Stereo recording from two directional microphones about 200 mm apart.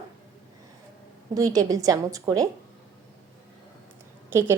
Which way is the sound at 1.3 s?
20° right (ahead or behind).